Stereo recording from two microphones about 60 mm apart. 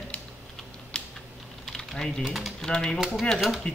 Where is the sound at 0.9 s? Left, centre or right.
Centre.